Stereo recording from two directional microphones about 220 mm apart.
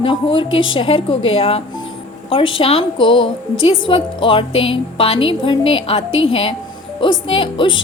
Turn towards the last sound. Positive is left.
turn(degrees=20)  # may be behind; listen again after turning